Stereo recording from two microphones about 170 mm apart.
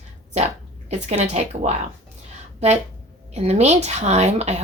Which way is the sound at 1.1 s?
45° right (ahead or behind).